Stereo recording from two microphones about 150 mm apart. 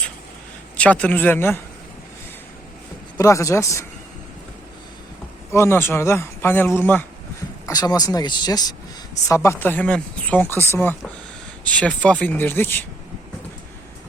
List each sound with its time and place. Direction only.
0.8 s speech: 10° left (ahead or behind)
3.2 s speech: 20° left (ahead or behind)
5.5 s speech: 15° left (ahead or behind)
7.7 s speech: 25° left (ahead or behind)